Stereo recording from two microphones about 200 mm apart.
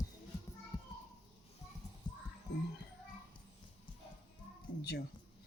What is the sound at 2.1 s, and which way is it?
Music, 20° left (ahead or behind).